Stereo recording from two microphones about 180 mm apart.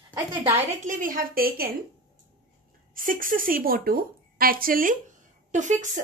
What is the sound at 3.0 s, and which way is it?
Speech, 50° right (ahead or behind).